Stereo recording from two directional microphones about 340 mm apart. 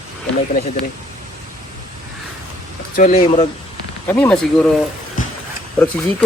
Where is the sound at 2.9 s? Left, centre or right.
Left.